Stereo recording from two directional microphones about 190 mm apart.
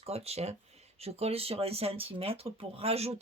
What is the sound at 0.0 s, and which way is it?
Speech, 30° right (ahead or behind).